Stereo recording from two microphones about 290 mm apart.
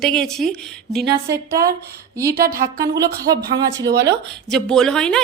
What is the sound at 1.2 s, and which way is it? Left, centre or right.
Speech, centre.